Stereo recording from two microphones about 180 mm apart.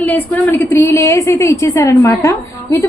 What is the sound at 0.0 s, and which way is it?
A woman's voice, 10° left (ahead or behind).